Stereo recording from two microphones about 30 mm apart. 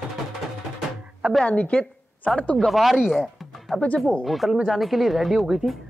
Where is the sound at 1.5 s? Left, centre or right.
Left.